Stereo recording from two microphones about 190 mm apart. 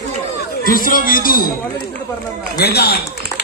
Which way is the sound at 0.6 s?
45° left (ahead or behind).